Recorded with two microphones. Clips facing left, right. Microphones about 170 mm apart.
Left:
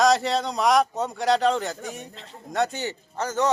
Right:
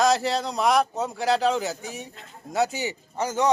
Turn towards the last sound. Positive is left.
turn(degrees=-10)  # may be behind; listen again after turning